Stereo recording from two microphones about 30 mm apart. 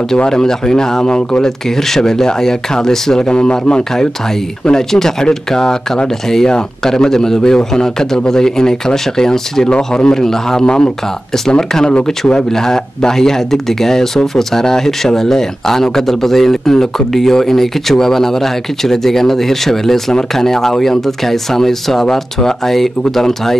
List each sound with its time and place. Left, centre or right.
0.3 s a man's voice: centre
3.2 s a man's voice: left
3.9 s a man's voice: centre
10.6 s a man's voice: left; by 23.6 s centre